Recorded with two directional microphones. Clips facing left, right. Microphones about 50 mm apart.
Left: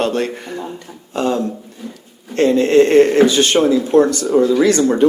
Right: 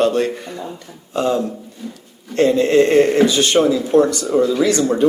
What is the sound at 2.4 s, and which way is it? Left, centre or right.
Speech, left.